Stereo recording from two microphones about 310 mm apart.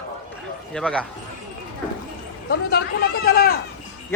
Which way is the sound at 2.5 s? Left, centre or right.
Left.